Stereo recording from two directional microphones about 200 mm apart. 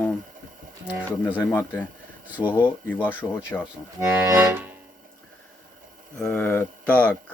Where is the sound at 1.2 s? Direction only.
10° left (ahead or behind).